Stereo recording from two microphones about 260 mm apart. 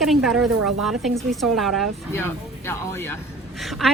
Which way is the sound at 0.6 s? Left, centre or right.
Right.